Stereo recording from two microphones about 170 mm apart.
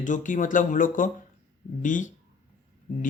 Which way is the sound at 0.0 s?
50° left (ahead or behind).